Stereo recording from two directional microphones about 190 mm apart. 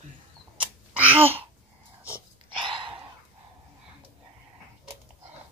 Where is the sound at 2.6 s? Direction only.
25° right (ahead or behind).